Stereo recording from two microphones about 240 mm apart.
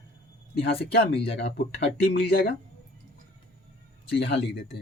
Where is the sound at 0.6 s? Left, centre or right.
Left.